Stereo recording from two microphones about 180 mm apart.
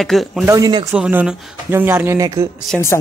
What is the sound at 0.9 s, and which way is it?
Speech, 5° right (ahead or behind).